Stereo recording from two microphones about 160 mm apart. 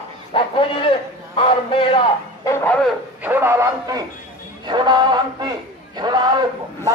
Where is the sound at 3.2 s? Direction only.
15° right (ahead or behind).